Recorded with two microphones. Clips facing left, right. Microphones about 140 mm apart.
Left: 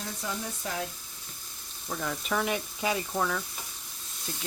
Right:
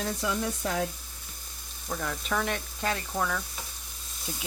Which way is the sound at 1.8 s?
5° left (ahead or behind).